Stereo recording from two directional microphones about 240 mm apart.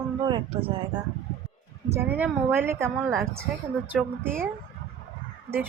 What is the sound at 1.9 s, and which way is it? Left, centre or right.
Speech, centre.